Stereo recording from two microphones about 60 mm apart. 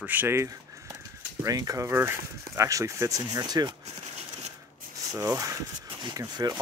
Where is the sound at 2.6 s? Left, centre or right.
Right.